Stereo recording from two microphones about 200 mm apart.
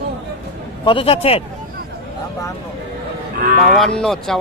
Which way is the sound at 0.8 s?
30° left (ahead or behind).